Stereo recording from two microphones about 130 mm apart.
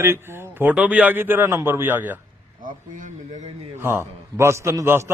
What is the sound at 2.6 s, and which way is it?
Speech, 85° right.